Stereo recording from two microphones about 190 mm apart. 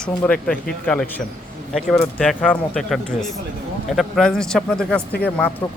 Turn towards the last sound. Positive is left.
turn(degrees=10)  # may be behind; listen again after turning